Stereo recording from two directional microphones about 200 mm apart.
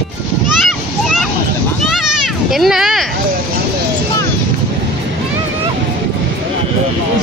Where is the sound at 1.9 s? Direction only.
Centre (ahead or behind).